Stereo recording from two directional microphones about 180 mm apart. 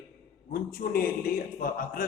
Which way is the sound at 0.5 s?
55° left (ahead or behind).